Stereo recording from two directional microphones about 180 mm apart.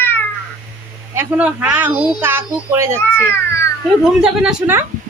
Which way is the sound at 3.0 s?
15° left (ahead or behind).